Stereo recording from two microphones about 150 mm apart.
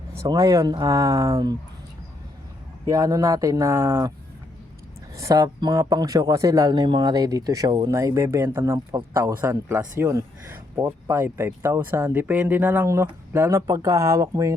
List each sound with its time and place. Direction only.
0.2 s speech: 20° right (ahead or behind)
2.8 s speech: 20° right (ahead or behind)
5.1 s speech: 20° right (ahead or behind)